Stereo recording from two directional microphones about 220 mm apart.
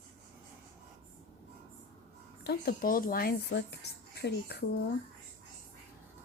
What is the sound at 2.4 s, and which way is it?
Speech, 45° left (ahead or behind).